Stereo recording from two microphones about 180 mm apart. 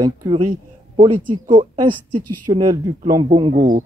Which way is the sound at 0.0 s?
20° right (ahead or behind).